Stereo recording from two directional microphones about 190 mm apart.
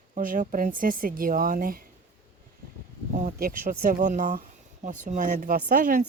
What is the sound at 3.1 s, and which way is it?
Speech, 45° right (ahead or behind).